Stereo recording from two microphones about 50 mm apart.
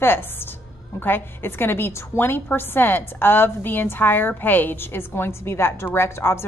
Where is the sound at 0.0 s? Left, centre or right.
Left.